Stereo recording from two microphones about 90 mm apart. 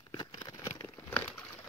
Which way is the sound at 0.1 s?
55° left (ahead or behind).